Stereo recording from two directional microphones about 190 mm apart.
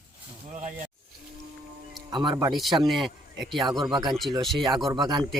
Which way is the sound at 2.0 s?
20° right (ahead or behind).